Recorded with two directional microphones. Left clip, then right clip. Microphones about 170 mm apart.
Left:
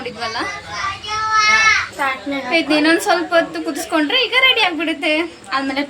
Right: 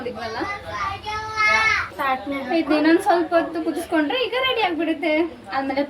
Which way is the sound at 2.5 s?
15° left (ahead or behind).